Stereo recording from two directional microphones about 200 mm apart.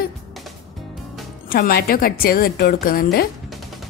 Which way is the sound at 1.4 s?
45° left (ahead or behind).